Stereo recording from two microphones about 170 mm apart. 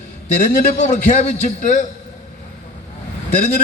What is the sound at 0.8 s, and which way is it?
A man's voice, 45° left (ahead or behind).